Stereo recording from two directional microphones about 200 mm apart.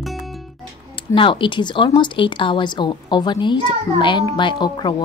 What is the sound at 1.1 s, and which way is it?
Speech, 25° left (ahead or behind).